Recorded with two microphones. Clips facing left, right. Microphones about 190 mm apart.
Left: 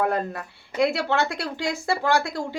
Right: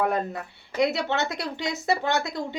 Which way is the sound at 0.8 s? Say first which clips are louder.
Left 2 dB; 20° right (ahead or behind).